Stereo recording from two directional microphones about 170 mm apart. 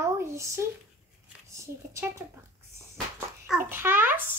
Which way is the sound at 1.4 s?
15° right (ahead or behind).